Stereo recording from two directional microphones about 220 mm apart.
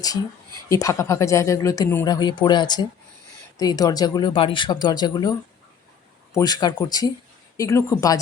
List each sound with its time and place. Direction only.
0.7 s speech: 15° left (ahead or behind)
6.3 s speech: 20° left (ahead or behind)